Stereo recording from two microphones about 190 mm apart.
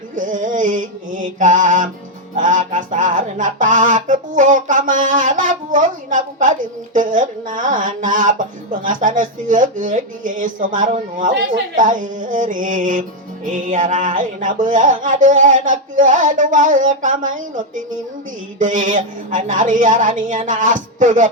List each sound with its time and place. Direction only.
0.2 s music: 45° right (ahead or behind)